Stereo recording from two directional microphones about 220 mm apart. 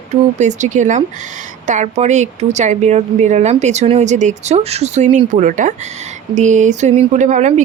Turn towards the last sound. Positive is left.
turn(degrees=-35)  # may be behind; listen again after turning